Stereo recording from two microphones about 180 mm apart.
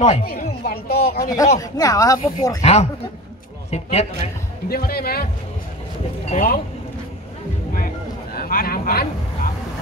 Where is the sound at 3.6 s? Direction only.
35° left (ahead or behind).